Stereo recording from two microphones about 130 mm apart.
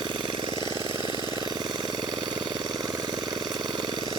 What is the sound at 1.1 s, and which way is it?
Vehicle, 35° right (ahead or behind).